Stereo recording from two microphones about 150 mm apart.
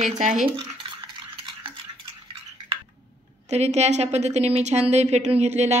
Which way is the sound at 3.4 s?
45° right (ahead or behind).